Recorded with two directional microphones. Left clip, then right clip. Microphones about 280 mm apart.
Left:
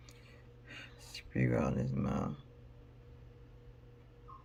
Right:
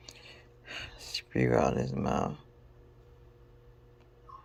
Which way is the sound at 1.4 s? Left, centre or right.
Centre.